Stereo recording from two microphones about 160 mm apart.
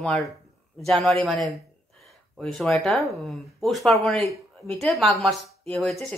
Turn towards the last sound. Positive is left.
turn(degrees=0)  # may be behind; listen again after turning